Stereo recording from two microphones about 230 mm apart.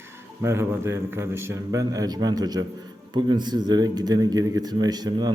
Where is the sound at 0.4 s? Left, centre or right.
Centre.